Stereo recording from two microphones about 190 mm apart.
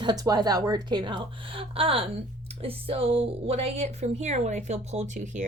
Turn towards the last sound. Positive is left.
turn(degrees=-40)  # may be behind; listen again after turning